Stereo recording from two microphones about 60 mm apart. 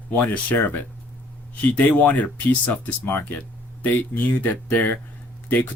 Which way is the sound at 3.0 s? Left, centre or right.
Left.